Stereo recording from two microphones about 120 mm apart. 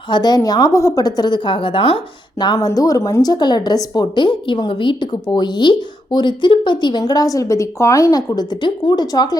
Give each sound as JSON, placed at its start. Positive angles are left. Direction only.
{"t": 0.1, "sound": "a woman's voice", "side_deg": 35}
{"t": 2.6, "sound": "a woman's voice", "side_deg": 30}